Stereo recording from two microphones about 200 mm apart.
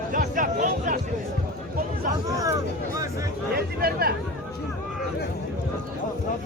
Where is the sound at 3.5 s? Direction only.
50° right (ahead or behind).